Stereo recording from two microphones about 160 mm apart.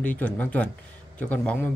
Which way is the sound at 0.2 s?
10° left (ahead or behind).